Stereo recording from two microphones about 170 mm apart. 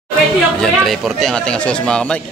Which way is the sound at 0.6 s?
Centre (ahead or behind).